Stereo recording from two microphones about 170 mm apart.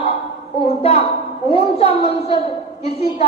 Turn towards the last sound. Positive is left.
turn(degrees=35)  # may be behind; listen again after turning